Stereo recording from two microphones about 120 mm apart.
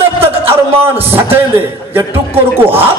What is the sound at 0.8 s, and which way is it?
Speech, 20° right (ahead or behind).